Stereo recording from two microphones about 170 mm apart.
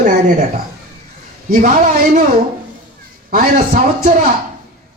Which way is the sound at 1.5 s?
55° right (ahead or behind).